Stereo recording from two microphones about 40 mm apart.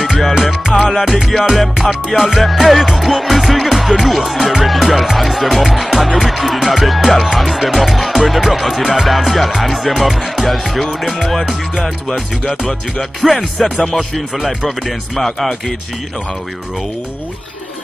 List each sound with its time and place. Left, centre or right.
0.0 s music: centre
12.1 s music: left
13.2 s music: centre
13.7 s speech: centre
14.3 s music: centre